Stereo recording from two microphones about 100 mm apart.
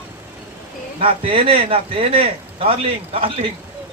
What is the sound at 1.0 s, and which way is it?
Speech, 65° right (ahead or behind).